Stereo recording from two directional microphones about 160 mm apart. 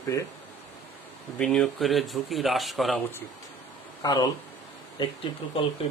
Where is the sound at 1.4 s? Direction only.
5° left (ahead or behind).